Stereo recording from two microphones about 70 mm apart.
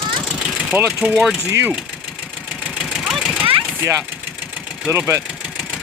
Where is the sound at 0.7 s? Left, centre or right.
Right.